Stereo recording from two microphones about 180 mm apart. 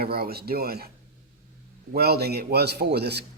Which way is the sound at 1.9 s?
60° right (ahead or behind).